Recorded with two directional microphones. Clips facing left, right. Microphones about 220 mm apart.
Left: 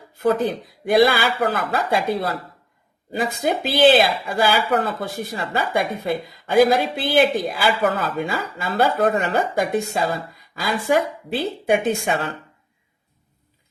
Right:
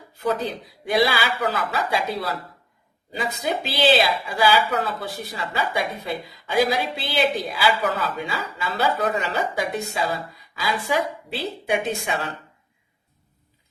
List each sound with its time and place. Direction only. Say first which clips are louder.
0.2 s speech: left 5 dB; 50° left (ahead or behind)